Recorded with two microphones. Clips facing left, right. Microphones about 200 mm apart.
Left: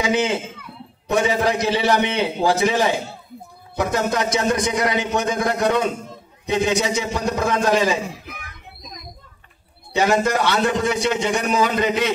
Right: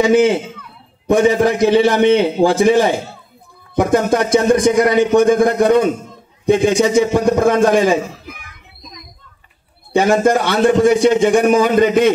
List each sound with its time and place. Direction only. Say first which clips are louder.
1.0 s speech: right 7 dB; 50° right (ahead or behind)
10.0 s speech: right 4 dB; 50° right (ahead or behind)